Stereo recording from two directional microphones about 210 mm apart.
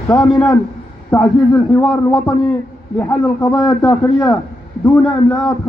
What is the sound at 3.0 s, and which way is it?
A man's voice, 10° left (ahead or behind).